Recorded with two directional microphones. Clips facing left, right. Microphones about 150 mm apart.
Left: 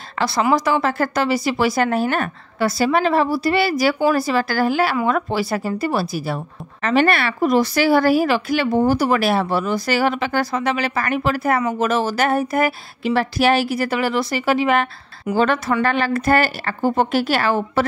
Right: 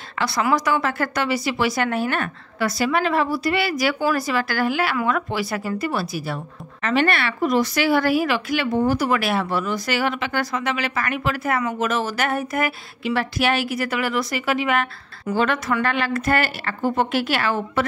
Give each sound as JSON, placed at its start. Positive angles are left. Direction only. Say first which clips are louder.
{"t": 0.2, "sound": "a woman's voice", "louder": "left 3 dB", "side_deg": 30}